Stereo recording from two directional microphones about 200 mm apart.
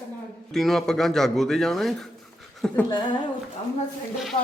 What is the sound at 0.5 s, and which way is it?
Speech, centre (ahead or behind).